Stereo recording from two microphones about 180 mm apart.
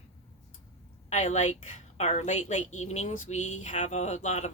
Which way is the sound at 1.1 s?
40° left (ahead or behind).